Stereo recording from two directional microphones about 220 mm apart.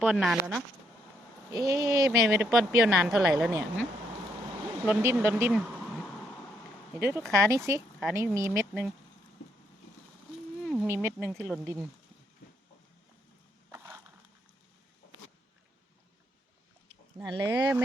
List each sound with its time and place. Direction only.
0.0 s a woman's voice: centre (ahead or behind)
1.5 s speech: 15° right (ahead or behind)
2.0 s a woman's voice: 5° right (ahead or behind)
4.9 s speech: 10° right (ahead or behind)
7.2 s a woman's voice: 5° left (ahead or behind)
7.5 s speech: 15° right (ahead or behind)
10.6 s a sound: centre (ahead or behind)
10.8 s speech: 10° right (ahead or behind)
11.2 s a woman's voice: centre (ahead or behind)
11.6 s speech: 10° right (ahead or behind)
13.7 s crushing: 10° right (ahead or behind)
17.2 s speech: 20° right (ahead or behind)